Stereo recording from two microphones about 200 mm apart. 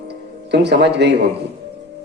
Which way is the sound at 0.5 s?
60° right (ahead or behind).